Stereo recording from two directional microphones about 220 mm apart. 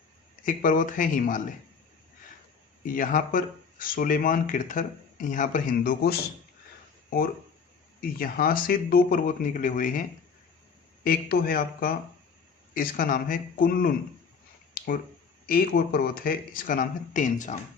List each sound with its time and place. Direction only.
0.4 s speech: 35° left (ahead or behind)
2.8 s speech: 40° left (ahead or behind)
11.0 s speech: 40° left (ahead or behind)
14.8 s a sound: 40° left (ahead or behind)
15.4 s speech: 45° left (ahead or behind)